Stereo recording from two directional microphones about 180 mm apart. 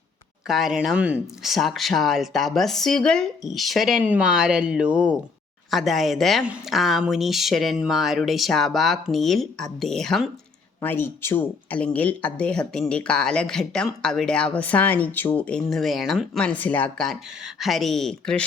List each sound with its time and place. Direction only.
0.4 s speech: centre (ahead or behind)